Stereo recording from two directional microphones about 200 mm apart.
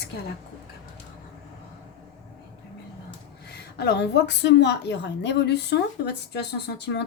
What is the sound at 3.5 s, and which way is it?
A woman's voice, 55° left (ahead or behind).